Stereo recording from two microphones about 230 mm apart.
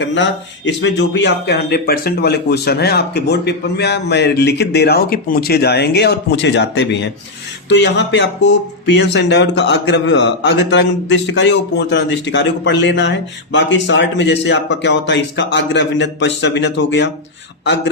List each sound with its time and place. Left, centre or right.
0.0 s speech: left